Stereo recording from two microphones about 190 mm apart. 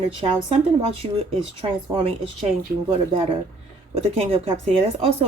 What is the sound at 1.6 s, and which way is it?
Speech, 30° right (ahead or behind).